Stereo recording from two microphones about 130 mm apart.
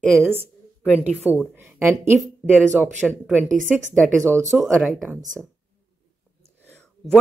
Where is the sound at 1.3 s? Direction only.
15° right (ahead or behind).